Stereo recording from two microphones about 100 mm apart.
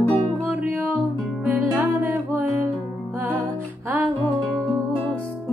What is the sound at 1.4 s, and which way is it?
Music, 15° right (ahead or behind).